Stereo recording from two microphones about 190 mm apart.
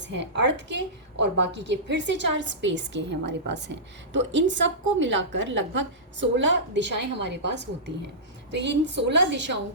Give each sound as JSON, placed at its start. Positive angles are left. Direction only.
{"t": 0.1, "sound": "a woman's voice", "side_deg": -70}